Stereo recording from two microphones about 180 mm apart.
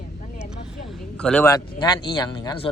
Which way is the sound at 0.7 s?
Centre (ahead or behind).